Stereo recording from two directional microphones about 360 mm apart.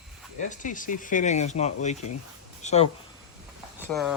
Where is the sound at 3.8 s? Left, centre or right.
Centre.